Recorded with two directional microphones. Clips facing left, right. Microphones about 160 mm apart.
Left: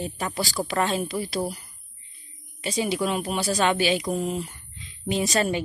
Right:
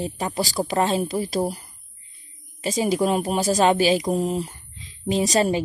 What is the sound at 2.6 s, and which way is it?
Speech, 40° right (ahead or behind).